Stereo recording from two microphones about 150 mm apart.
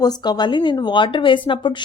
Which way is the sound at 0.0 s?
25° left (ahead or behind).